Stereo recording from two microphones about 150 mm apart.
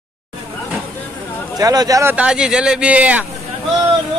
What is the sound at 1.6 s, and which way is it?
Speech, 25° right (ahead or behind).